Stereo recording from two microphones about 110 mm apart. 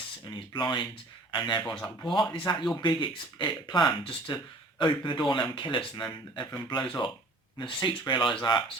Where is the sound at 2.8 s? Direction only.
45° left (ahead or behind).